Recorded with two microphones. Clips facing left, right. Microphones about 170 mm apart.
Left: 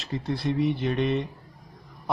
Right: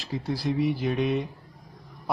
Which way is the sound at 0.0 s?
Centre (ahead or behind).